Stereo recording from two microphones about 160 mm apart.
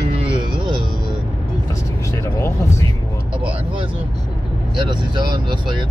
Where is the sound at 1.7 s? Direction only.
20° left (ahead or behind).